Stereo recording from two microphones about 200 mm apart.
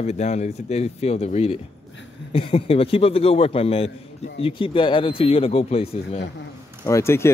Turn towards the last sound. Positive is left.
turn(degrees=15)  # may be behind; listen again after turning